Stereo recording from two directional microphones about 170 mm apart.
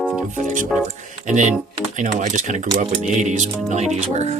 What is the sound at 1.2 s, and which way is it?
Speech, 45° right (ahead or behind).